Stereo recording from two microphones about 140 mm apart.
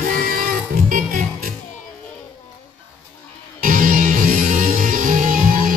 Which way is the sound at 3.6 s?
75° right (ahead or behind).